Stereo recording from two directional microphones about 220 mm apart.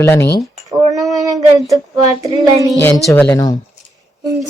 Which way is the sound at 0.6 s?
15° right (ahead or behind).